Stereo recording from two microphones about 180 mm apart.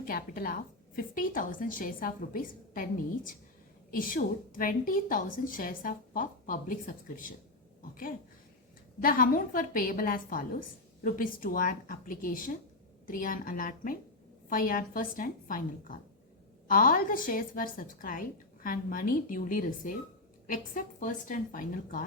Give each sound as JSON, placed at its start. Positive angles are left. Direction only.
{"t": 0.0, "sound": "a woman's voice", "side_deg": 55}